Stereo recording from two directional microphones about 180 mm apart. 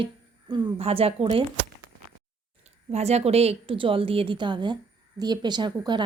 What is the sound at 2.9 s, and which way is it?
A woman's voice, 35° right (ahead or behind).